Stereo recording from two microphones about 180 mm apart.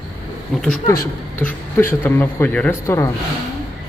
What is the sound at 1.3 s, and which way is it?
Speech, 15° left (ahead or behind).